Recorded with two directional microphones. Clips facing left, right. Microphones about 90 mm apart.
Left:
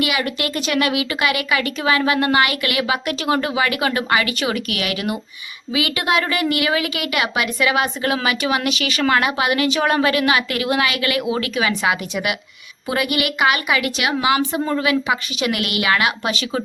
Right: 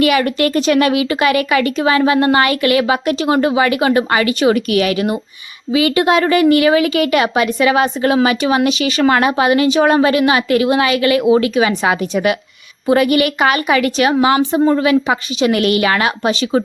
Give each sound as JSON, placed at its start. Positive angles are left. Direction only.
{"t": 0.0, "sound": "a woman's voice", "side_deg": -40}